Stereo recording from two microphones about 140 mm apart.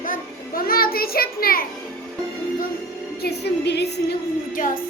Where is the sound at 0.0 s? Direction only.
85° left.